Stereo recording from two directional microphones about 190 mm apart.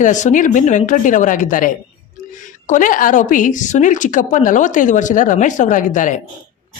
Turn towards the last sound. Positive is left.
turn(degrees=40)  # may be behind; listen again after turning